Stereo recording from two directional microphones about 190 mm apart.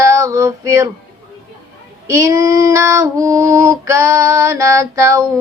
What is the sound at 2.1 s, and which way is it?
Female singing, 15° right (ahead or behind).